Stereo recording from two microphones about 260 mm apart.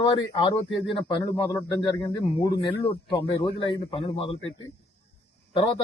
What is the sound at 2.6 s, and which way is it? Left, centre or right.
Speech, centre.